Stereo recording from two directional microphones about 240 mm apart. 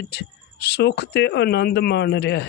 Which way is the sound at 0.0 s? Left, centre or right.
Left.